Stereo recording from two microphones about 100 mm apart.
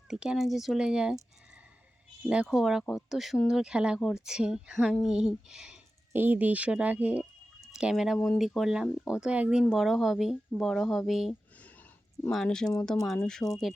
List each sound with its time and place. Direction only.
0.1 s speech: 5° right (ahead or behind)
2.5 s a woman's voice: 5° right (ahead or behind)
6.1 s a woman's voice: 20° right (ahead or behind); by 11.3 s centre (ahead or behind)
11.5 s a sound: 15° left (ahead or behind)
12.3 s speech: 5° left (ahead or behind)